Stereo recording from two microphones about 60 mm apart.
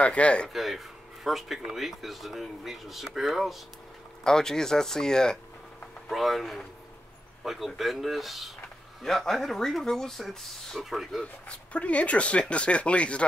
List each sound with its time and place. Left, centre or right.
0.0 s speech: left
0.5 s speech: centre
4.2 s speech: centre
6.0 s speech: centre
11.4 s speech: left